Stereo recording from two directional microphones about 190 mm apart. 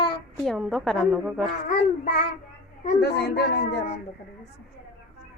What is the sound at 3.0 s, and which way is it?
Speech, 60° left (ahead or behind).